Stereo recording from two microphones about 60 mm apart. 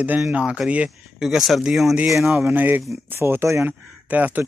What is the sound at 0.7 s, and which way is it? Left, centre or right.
Speech, right.